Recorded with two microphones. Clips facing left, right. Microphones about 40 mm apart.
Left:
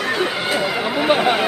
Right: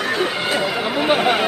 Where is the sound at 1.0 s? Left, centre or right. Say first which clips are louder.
Left 1 dB; centre.